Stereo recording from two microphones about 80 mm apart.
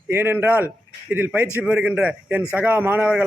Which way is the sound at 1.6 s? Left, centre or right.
Centre.